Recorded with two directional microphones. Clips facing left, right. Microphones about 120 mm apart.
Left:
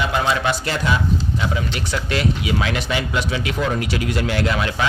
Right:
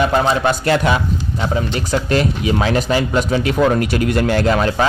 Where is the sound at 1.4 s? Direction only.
40° right (ahead or behind).